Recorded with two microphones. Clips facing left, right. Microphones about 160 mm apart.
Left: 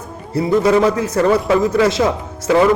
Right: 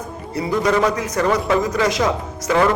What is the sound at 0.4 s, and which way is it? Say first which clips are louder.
A man's voice: left 5 dB; 30° left (ahead or behind).